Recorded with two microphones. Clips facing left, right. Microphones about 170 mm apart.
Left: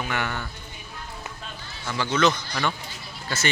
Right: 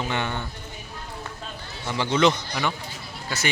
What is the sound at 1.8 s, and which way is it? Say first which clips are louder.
Speech: right 2 dB; 20° right (ahead or behind).